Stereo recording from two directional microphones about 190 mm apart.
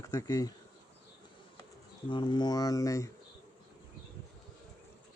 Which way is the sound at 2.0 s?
25° left (ahead or behind).